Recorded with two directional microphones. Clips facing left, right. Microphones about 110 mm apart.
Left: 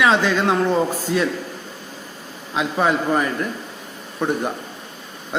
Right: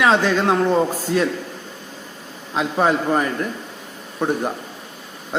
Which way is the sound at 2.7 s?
30° right (ahead or behind).